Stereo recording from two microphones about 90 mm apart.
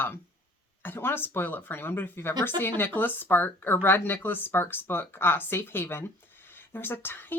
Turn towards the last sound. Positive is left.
turn(degrees=25)  # may be behind; listen again after turning